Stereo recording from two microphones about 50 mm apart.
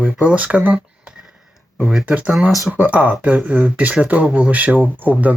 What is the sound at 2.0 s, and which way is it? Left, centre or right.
Speech, right.